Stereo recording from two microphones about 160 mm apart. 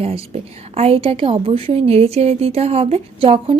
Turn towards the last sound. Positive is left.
turn(degrees=-35)  # may be behind; listen again after turning